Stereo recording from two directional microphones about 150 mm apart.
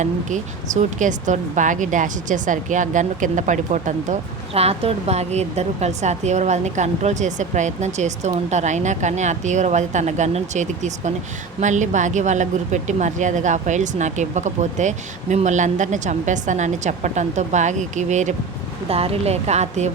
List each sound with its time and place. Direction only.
0.0 s speech: 55° right (ahead or behind)
18.9 s speech: 40° right (ahead or behind)